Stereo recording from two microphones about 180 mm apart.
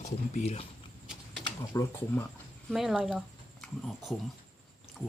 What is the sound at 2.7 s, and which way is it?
Speech, centre (ahead or behind).